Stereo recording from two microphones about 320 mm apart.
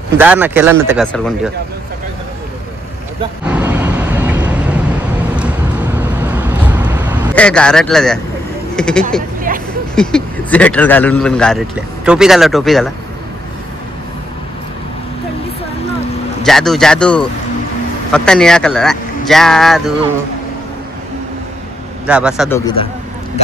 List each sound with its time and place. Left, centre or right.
0.2 s speech: centre
3.4 s vehicle: centre
5.9 s vehicle: centre
8.7 s speech: centre
16.4 s speech: centre
22.0 s speech: centre
22.5 s speech: centre